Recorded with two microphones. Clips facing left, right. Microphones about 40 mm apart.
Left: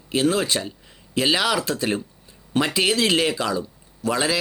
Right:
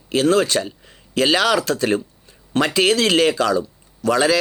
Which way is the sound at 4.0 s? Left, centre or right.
Right.